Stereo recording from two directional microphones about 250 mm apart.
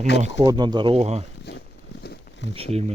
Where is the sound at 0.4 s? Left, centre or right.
Centre.